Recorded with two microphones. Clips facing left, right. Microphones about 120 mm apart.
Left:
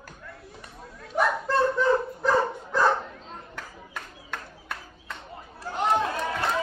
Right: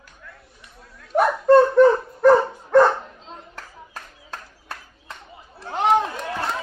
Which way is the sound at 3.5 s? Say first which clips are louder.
Even; 35° right (ahead or behind).